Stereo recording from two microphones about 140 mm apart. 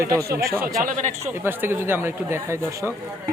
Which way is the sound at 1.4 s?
15° right (ahead or behind).